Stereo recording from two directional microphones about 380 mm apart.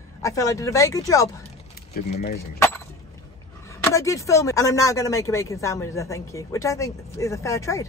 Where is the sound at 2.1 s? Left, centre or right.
Left.